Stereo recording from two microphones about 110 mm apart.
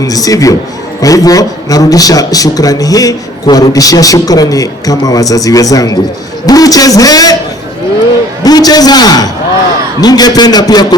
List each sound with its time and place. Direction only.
0.0 s a man's voice: 35° left (ahead or behind)
8.4 s a man's voice: 35° left (ahead or behind)